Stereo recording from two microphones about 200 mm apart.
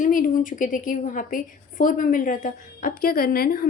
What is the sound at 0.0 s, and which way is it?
A woman's voice, 40° left (ahead or behind).